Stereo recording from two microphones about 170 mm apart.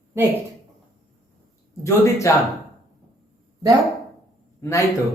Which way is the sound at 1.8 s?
15° left (ahead or behind).